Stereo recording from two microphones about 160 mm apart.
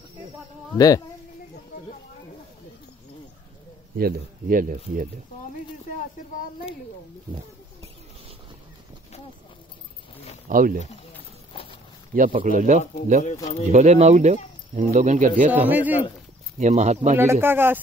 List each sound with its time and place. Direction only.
0.7 s speech: 25° left (ahead or behind)
3.9 s speech: 65° right (ahead or behind)
10.5 s speech: 60° right (ahead or behind)
11.5 s walk: 35° left (ahead or behind)
12.1 s speech: 60° right (ahead or behind)
15.5 s speech: 10° right (ahead or behind)
16.5 s speech: 50° right (ahead or behind)
17.2 s speech: 15° right (ahead or behind)